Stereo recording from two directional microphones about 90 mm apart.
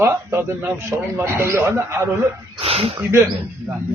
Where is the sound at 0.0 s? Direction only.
25° right (ahead or behind).